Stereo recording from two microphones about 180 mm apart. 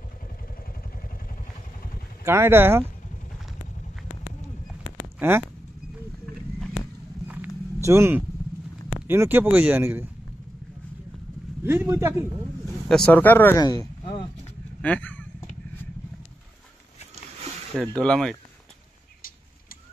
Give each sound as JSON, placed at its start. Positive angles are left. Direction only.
{"t": 2.2, "sound": "speech", "side_deg": -15}
{"t": 7.2, "sound": "a sound", "side_deg": -10}
{"t": 9.0, "sound": "speech", "side_deg": -10}
{"t": 11.6, "sound": "speech", "side_deg": -15}
{"t": 12.8, "sound": "speech", "side_deg": 5}
{"t": 13.6, "sound": "speech", "side_deg": 20}
{"t": 14.8, "sound": "vehicle", "side_deg": 10}
{"t": 17.9, "sound": "speech", "side_deg": 5}